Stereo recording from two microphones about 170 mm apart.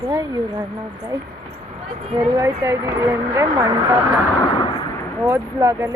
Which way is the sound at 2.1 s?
20° right (ahead or behind).